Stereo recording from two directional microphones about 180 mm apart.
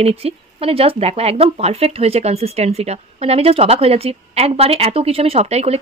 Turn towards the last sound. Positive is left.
turn(degrees=-35)  # may be behind; listen again after turning